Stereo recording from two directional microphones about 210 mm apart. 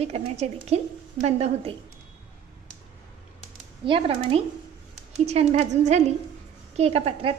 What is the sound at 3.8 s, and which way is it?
A woman's voice, 25° right (ahead or behind).